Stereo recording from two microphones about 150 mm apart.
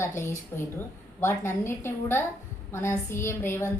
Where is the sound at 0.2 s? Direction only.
15° left (ahead or behind).